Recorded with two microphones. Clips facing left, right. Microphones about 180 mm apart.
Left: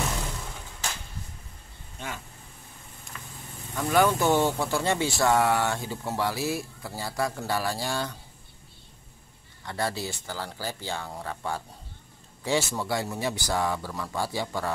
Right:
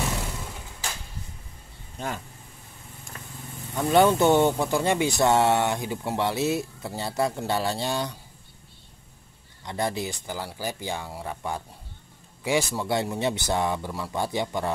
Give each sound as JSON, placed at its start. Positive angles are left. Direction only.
{"t": 3.1, "sound": "vehicle", "side_deg": -40}
{"t": 3.7, "sound": "speech", "side_deg": -25}
{"t": 9.7, "sound": "speech", "side_deg": -20}